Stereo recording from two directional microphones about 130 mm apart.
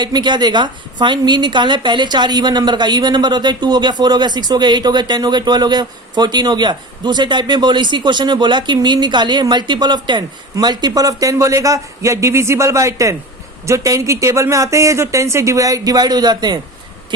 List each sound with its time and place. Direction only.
0.0 s a woman's voice: 35° right (ahead or behind)